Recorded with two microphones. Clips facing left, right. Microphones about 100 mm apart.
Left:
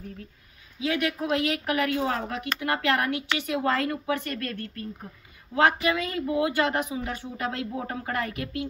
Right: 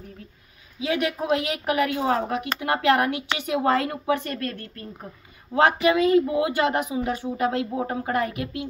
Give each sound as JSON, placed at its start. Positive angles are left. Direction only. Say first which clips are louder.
{"t": 0.7, "sound": "speech", "louder": "right 2 dB", "side_deg": -20}